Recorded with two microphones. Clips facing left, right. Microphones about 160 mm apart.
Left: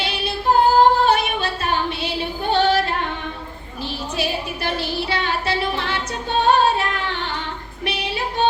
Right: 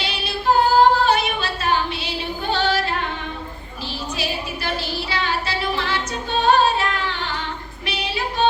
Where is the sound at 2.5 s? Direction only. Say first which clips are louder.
Left 4 dB; 55° left (ahead or behind).